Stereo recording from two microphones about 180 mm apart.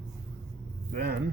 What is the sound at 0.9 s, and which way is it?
Speech, 65° right (ahead or behind).